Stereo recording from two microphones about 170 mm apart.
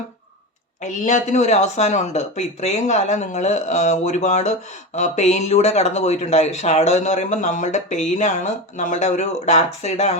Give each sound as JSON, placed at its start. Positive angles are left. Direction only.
{"t": 0.8, "sound": "speech", "side_deg": 45}